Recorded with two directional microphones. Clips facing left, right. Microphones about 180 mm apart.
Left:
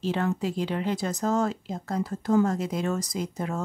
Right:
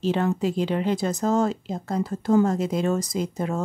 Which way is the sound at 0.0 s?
25° right (ahead or behind).